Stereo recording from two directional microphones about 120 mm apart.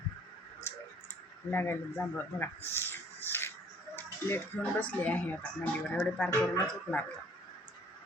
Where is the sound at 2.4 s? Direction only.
20° left (ahead or behind).